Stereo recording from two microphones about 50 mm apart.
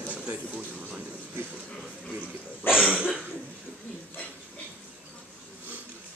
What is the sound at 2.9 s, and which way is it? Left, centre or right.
Cough, centre.